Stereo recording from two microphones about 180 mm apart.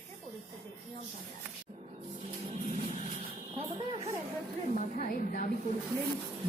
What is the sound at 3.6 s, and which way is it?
Speech, 30° right (ahead or behind).